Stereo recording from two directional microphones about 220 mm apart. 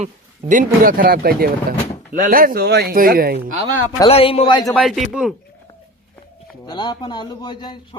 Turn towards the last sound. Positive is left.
turn(degrees=20)  # may be behind; listen again after turning